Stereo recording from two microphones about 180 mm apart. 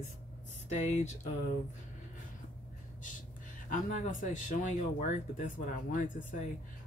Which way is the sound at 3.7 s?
45° left (ahead or behind).